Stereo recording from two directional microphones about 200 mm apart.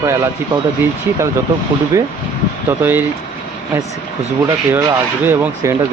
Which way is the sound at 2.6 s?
10° right (ahead or behind).